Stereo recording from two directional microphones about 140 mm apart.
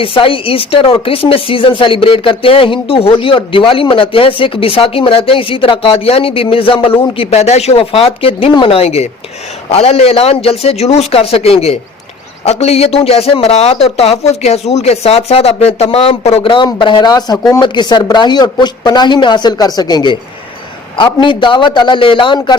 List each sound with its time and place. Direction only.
0.0 s speech: 40° left (ahead or behind)